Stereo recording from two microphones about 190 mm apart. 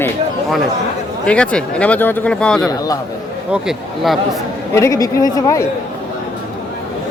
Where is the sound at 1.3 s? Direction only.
5° left (ahead or behind).